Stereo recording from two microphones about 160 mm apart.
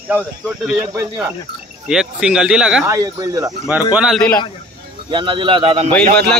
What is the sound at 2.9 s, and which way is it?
Speech, 20° right (ahead or behind).